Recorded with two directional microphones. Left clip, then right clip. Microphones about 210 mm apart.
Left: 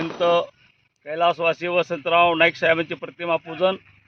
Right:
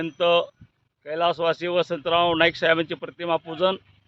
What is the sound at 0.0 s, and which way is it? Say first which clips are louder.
Speech: left 1 dB; centre (ahead or behind).